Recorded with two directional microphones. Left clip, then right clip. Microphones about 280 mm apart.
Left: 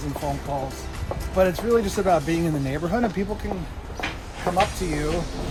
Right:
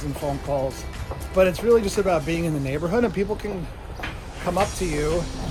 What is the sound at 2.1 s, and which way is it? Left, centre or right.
Speech, centre.